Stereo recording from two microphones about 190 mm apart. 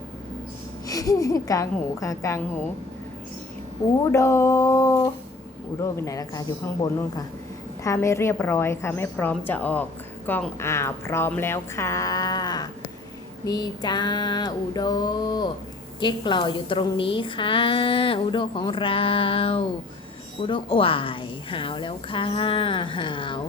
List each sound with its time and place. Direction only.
0.9 s speech: 20° left (ahead or behind)
4.0 s a woman's voice: 15° left (ahead or behind)